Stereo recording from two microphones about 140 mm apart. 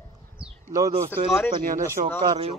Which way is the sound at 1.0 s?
15° left (ahead or behind).